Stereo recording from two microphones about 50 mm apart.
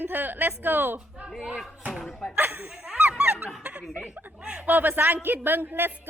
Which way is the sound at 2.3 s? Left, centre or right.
Right.